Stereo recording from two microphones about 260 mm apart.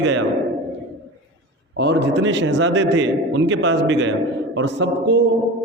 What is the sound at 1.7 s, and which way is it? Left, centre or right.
A man's voice, right.